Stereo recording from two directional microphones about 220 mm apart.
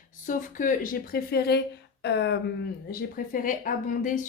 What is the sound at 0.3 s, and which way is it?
Speech, 35° left (ahead or behind).